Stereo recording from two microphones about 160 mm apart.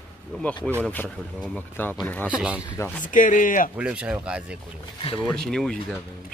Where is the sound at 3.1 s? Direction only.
55° left (ahead or behind).